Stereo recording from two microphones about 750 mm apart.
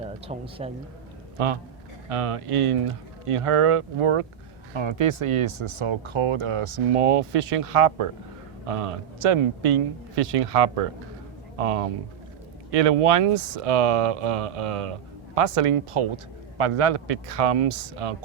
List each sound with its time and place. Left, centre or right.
0.3 s speech: centre
2.0 s a man's voice: right